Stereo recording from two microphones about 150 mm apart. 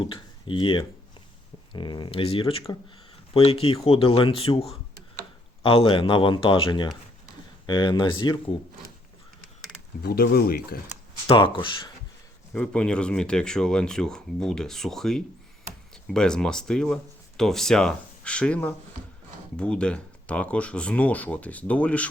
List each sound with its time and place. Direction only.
0.0 s speech: 35° left (ahead or behind)
10.0 s speech: 90° left
11.3 s speech: 35° left (ahead or behind)
12.5 s speech: 5° left (ahead or behind)